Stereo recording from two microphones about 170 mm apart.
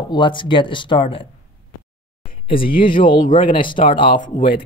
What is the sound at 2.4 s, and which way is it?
Speech, 30° left (ahead or behind).